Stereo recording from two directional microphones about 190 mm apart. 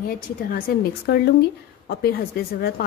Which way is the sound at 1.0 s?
55° left (ahead or behind).